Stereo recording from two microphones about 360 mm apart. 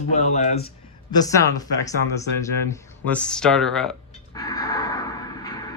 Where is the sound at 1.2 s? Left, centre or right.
Centre.